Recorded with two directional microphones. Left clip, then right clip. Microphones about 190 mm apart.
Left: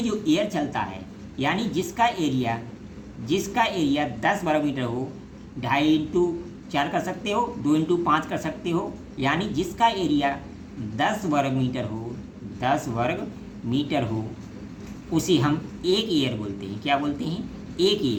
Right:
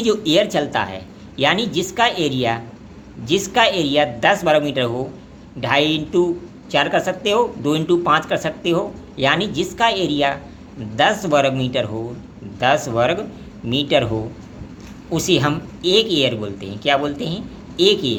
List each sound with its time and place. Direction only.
0.0 s a man's voice: 40° right (ahead or behind)
15.1 s a man's voice: 30° right (ahead or behind)